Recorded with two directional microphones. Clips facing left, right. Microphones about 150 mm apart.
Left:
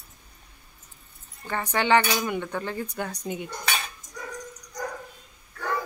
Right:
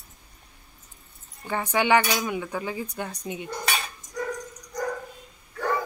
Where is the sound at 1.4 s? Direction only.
10° right (ahead or behind).